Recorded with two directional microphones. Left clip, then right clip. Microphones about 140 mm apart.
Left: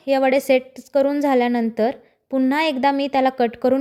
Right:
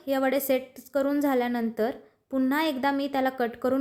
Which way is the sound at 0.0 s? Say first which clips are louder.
Left 8 dB; 30° left (ahead or behind).